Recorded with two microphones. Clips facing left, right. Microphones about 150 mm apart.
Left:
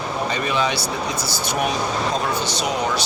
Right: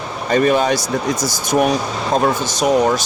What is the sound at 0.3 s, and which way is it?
Speech, 50° right (ahead or behind).